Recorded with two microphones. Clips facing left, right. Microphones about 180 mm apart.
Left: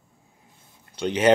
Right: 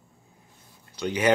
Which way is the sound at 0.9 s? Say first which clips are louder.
Left 4 dB; 25° left (ahead or behind).